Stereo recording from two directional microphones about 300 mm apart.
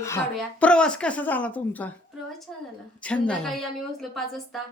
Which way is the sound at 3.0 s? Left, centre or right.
Centre.